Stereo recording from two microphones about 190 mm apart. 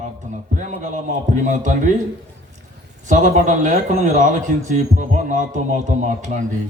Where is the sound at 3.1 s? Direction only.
40° right (ahead or behind).